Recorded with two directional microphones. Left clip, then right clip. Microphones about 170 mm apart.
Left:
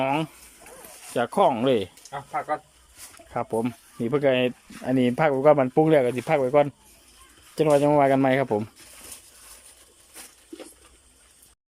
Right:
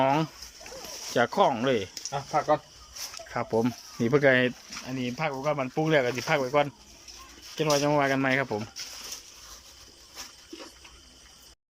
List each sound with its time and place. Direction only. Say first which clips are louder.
0.0 s speech: even; 10° left (ahead or behind)
2.0 s speech: right 3 dB; 10° right (ahead or behind)
3.3 s speech: left 1 dB; 10° left (ahead or behind)
4.9 s speech: left 10 dB; 50° left (ahead or behind); by 8.6 s 25° left (ahead or behind)